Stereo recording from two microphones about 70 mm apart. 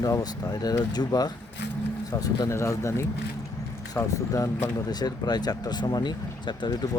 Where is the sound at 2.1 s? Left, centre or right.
Left.